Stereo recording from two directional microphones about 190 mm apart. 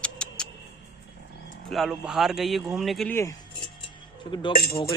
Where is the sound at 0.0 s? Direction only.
5° left (ahead or behind).